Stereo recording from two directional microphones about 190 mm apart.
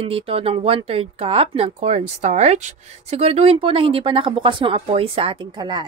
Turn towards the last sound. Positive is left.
turn(degrees=-25)  # may be behind; listen again after turning